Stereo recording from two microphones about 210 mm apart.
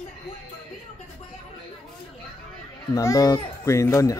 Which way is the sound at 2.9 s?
15° left (ahead or behind).